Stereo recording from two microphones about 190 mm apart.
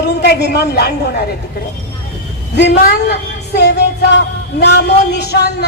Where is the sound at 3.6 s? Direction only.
60° left (ahead or behind).